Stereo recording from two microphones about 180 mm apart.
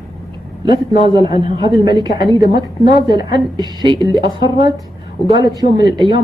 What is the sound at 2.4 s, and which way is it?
Speech, 60° left (ahead or behind).